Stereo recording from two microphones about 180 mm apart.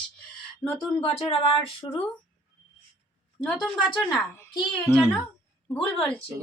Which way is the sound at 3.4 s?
Centre (ahead or behind).